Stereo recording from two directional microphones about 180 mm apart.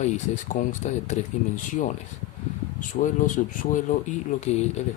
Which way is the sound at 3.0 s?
45° left (ahead or behind).